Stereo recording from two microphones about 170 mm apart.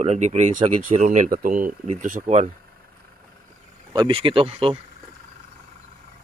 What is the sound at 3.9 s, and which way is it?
Speech, 30° right (ahead or behind).